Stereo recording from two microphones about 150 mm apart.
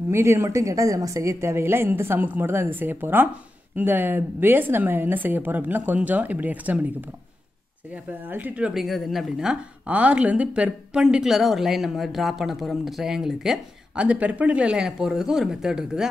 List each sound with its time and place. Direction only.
0.1 s speech: 15° right (ahead or behind)